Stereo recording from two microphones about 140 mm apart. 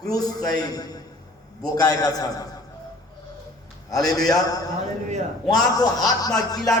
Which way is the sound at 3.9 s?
25° left (ahead or behind).